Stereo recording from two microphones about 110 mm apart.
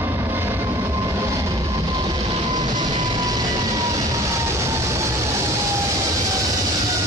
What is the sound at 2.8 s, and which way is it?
Vehicle, 40° right (ahead or behind).